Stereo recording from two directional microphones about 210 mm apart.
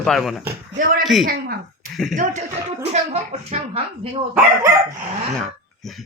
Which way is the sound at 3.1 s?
30° right (ahead or behind).